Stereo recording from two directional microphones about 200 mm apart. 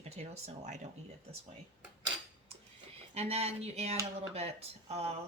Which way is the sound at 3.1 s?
30° right (ahead or behind).